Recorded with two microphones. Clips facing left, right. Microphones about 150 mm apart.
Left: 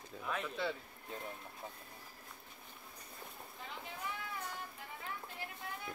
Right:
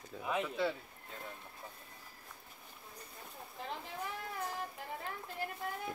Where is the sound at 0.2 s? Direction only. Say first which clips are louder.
Right 4 dB; 15° right (ahead or behind).